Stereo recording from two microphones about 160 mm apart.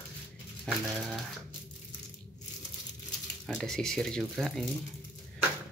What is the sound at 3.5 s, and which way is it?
Speech, 5° left (ahead or behind).